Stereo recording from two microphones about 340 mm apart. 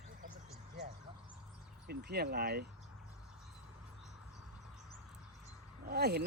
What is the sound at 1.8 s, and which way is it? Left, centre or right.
Speech, right.